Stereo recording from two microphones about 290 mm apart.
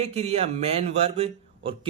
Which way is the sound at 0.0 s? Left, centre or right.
Right.